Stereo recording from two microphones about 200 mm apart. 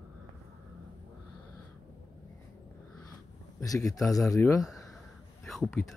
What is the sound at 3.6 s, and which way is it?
Speech, 15° left (ahead or behind).